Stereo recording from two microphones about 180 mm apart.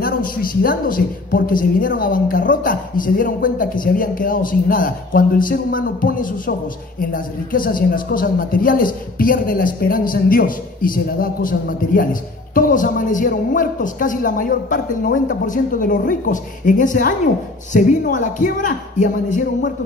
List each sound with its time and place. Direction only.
0.0 s a man's voice: 50° left (ahead or behind)